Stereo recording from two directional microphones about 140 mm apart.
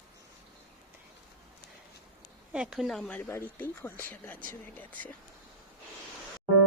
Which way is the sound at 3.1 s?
15° left (ahead or behind).